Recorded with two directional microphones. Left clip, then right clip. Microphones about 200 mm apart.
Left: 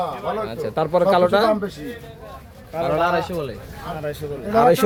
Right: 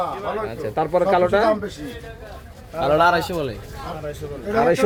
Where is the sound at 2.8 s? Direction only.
65° right (ahead or behind).